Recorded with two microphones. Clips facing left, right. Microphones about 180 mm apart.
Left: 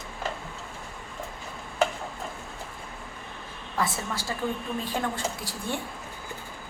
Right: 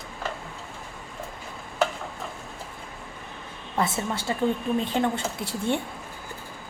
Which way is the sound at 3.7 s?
25° right (ahead or behind).